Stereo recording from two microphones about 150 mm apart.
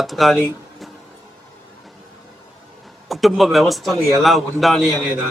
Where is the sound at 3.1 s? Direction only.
Centre (ahead or behind).